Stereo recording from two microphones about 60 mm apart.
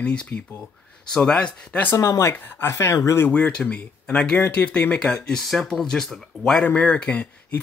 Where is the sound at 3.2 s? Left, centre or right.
Left.